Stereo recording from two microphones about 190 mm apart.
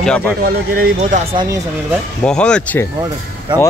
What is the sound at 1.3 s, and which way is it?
Speech, 25° right (ahead or behind).